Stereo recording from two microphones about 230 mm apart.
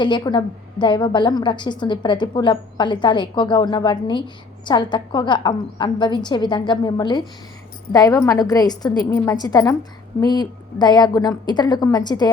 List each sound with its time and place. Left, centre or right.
0.0 s a woman's voice: centre